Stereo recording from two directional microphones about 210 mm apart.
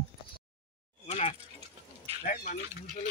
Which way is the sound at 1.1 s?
30° left (ahead or behind).